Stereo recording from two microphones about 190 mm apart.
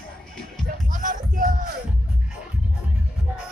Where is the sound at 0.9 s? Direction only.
45° right (ahead or behind).